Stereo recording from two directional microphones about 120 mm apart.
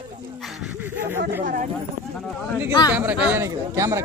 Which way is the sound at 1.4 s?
90° right.